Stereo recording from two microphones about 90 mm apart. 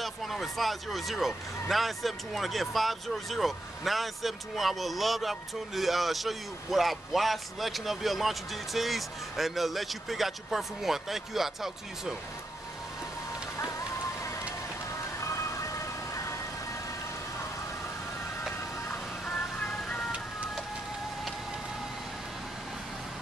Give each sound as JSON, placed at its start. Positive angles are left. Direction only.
{"t": 0.0, "sound": "speech", "side_deg": 0}
{"t": 15.1, "sound": "ice cream truck", "side_deg": 35}
{"t": 19.2, "sound": "music", "side_deg": 10}